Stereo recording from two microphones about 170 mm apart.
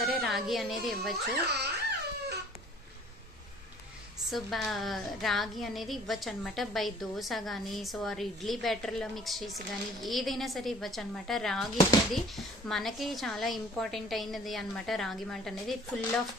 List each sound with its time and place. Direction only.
0.2 s a woman's voice: centre (ahead or behind)
1.4 s laughter: 75° right (ahead or behind)
4.3 s speech: centre (ahead or behind)